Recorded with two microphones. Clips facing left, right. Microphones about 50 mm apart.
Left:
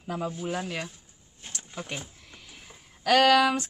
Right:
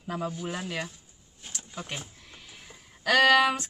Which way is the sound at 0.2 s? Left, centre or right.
Centre.